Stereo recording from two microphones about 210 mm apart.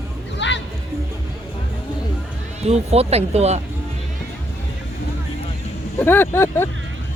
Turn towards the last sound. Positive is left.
turn(degrees=10)  # may be behind; listen again after turning